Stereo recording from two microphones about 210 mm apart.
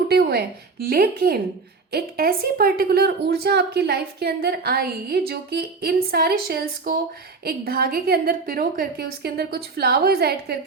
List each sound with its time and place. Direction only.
0.1 s a woman's voice: 50° right (ahead or behind)